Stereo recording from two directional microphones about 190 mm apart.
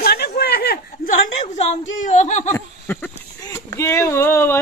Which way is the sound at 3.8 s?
15° left (ahead or behind).